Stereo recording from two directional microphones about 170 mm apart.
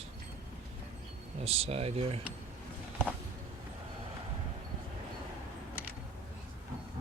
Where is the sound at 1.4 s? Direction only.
35° right (ahead or behind).